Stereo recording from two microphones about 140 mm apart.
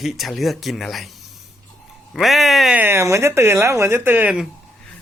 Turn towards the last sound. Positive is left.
turn(degrees=-10)  # may be behind; listen again after turning